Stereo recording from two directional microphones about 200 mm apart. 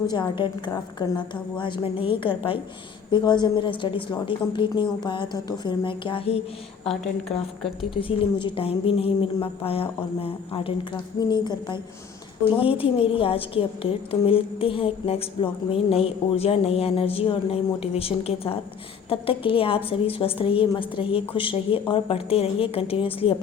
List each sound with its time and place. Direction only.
0.1 s a woman's voice: 25° left (ahead or behind)
7.9 s a woman's voice: 25° left (ahead or behind)